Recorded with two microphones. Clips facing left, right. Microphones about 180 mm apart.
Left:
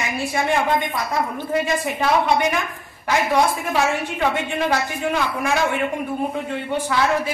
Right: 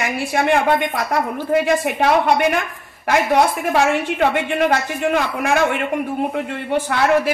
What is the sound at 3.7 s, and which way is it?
A woman's voice, 65° right (ahead or behind).